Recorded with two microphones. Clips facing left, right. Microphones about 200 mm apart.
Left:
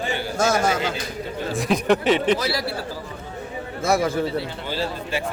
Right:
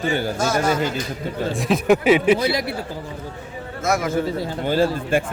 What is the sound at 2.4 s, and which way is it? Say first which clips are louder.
Speech: right 3 dB; 20° right (ahead or behind).